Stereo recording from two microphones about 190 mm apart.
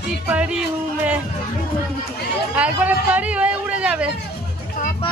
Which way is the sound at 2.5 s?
5° right (ahead or behind).